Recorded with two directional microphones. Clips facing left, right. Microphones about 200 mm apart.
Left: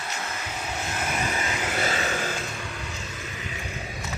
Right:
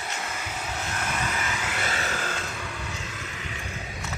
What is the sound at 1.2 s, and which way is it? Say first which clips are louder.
Vehicle: left 2 dB; 20° left (ahead or behind).